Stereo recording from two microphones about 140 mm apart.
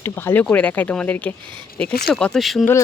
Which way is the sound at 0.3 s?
15° left (ahead or behind).